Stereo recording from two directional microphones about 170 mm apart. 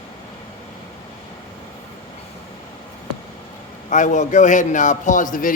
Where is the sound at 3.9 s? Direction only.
45° left (ahead or behind).